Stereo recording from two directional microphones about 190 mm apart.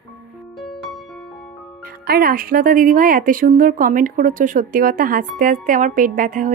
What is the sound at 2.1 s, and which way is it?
A woman's voice, 50° right (ahead or behind).